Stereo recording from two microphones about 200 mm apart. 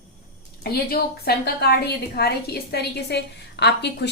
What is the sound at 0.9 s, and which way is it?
A woman's voice, 50° left (ahead or behind).